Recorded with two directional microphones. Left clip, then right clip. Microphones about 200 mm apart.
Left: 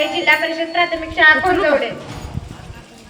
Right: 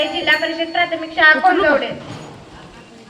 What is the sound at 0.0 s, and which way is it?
Speech, 25° left (ahead or behind).